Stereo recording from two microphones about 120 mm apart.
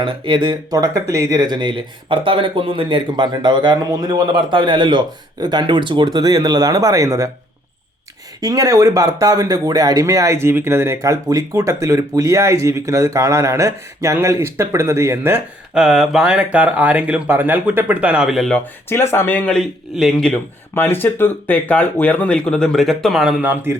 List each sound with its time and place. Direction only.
0.0 s speech: 40° right (ahead or behind)
0.8 s speech: 30° right (ahead or behind)
8.4 s speech: 30° right (ahead or behind)
15.7 s speech: 5° right (ahead or behind)
18.5 s speech: 15° left (ahead or behind)
20.7 s speech: 15° left (ahead or behind); by 23.3 s centre (ahead or behind)
23.4 s speech: 15° right (ahead or behind)